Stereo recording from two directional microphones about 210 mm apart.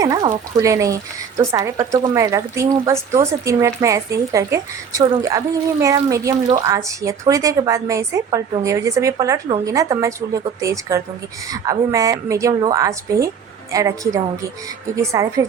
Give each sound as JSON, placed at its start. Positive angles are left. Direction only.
{"t": 0.0, "sound": "speech", "side_deg": -15}